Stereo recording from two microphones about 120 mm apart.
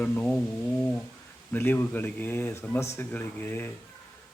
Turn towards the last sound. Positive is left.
turn(degrees=15)  # may be behind; listen again after turning